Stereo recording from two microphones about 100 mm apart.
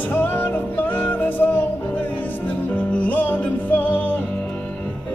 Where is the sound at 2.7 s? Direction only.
15° left (ahead or behind).